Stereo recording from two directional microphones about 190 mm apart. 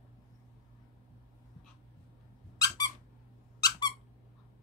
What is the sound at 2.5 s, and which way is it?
Squeak, 20° left (ahead or behind).